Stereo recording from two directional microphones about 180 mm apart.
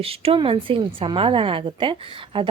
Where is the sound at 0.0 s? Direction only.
30° right (ahead or behind).